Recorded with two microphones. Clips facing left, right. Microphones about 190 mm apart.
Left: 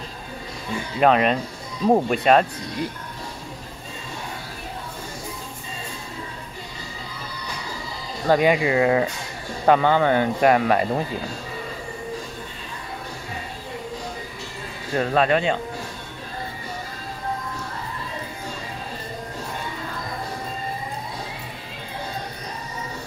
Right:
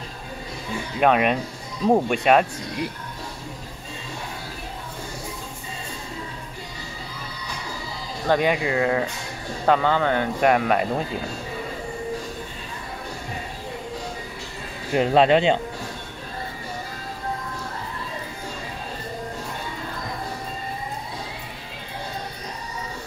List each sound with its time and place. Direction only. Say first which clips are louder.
0.9 s speech: left 1 dB; 5° right (ahead or behind)
1.9 s speech: left 1 dB; 5° left (ahead or behind)
2.2 s speech: left 1 dB; 5° right (ahead or behind)
8.3 s speech: left 3 dB; 10° left (ahead or behind)
10.4 s speech: even; centre (ahead or behind)
14.9 s speech: right 3 dB; 15° right (ahead or behind)